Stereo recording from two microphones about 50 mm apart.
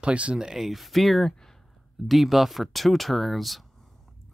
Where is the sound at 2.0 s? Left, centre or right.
Centre.